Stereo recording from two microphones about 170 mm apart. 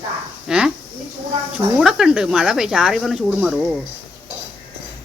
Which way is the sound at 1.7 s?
5° right (ahead or behind).